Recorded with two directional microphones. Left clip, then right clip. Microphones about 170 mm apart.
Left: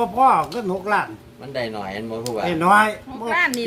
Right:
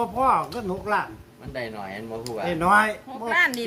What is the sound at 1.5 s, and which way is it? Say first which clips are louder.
Speech: left 6 dB; 55° left (ahead or behind).